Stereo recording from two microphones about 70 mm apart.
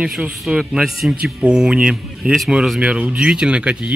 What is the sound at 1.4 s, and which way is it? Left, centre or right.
A man's voice, centre.